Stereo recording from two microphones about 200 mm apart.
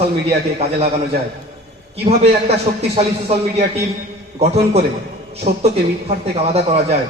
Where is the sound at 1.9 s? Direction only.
30° right (ahead or behind).